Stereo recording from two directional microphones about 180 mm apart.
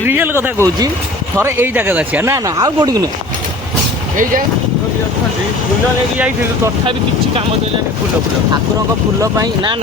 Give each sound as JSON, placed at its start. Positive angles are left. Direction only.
{"t": 0.1, "sound": "speech", "side_deg": -10}
{"t": 9.2, "sound": "speech", "side_deg": -20}